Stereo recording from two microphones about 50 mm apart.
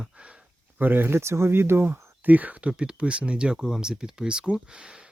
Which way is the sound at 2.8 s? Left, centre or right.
Right.